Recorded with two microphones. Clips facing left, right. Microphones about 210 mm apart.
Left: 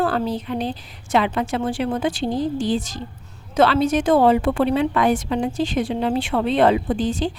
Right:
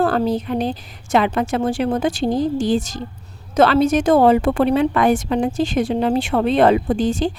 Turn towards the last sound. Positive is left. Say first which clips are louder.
# right 3 dB
turn(degrees=-45)  # may be behind; listen again after turning